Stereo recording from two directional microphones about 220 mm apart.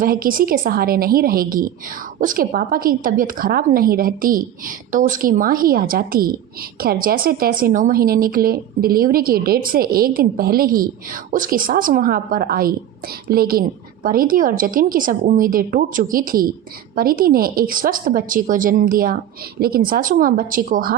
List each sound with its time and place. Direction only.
0.0 s a woman's voice: 40° right (ahead or behind)